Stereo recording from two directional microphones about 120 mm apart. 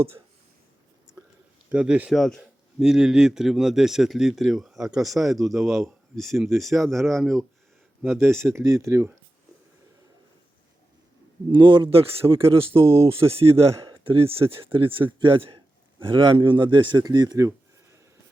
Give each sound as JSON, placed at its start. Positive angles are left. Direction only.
{"t": 1.2, "sound": "whispering", "side_deg": -30}
{"t": 1.7, "sound": "speech", "side_deg": -10}
{"t": 2.1, "sound": "speech", "side_deg": 0}
{"t": 8.1, "sound": "speech", "side_deg": -20}
{"t": 11.5, "sound": "a man's voice", "side_deg": -45}
{"t": 12.8, "sound": "speech", "side_deg": -25}
{"t": 13.2, "sound": "a man's voice", "side_deg": -50}